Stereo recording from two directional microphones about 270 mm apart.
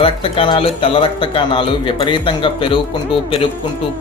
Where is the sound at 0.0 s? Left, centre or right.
Centre.